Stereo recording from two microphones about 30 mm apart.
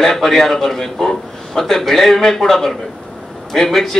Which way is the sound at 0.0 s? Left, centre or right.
Centre.